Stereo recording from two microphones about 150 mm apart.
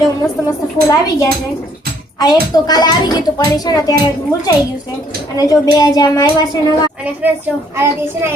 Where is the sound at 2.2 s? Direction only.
25° left (ahead or behind).